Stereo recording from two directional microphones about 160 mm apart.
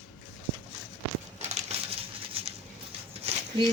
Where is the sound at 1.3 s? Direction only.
45° right (ahead or behind).